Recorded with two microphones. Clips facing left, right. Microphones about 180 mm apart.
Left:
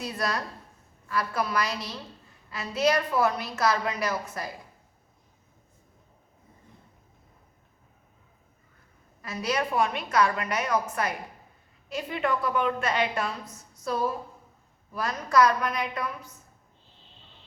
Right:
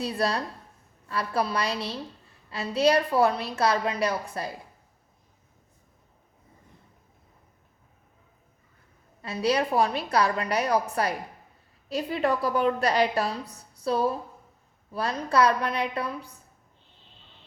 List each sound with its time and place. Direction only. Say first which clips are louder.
0.0 s a woman's voice: right 3 dB; 30° right (ahead or behind)
9.2 s a woman's voice: right 4 dB; 30° right (ahead or behind)